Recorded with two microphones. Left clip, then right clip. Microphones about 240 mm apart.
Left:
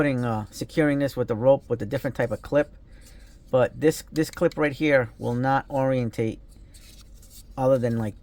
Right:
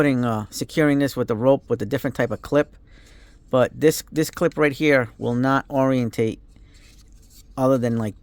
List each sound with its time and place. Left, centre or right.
0.0 s speech: right
7.5 s speech: right